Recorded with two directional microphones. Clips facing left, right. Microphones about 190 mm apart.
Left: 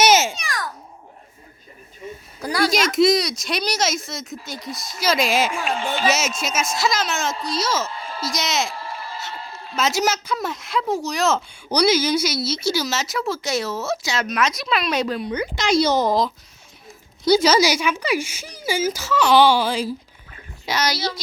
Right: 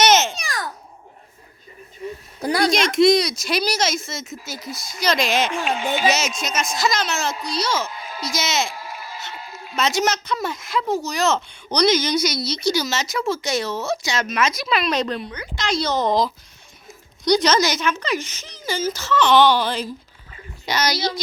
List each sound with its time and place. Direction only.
0.0 s babbling: 10° left (ahead or behind)
0.3 s babbling: 30° right (ahead or behind)
2.4 s speech: 25° right (ahead or behind)
2.6 s a man's voice: centre (ahead or behind)
6.1 s a man's voice: 5° left (ahead or behind)
7.9 s a man's voice: 10° right (ahead or behind)